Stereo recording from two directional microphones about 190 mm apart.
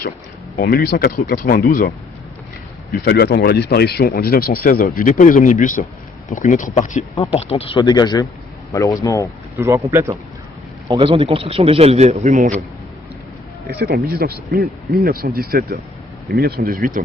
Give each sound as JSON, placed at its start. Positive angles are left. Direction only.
{"t": 0.5, "sound": "speech", "side_deg": 50}
{"t": 2.9, "sound": "speech", "side_deg": 55}
{"t": 9.6, "sound": "speech", "side_deg": -15}
{"t": 10.8, "sound": "a man's voice", "side_deg": -30}
{"t": 13.7, "sound": "speech", "side_deg": -55}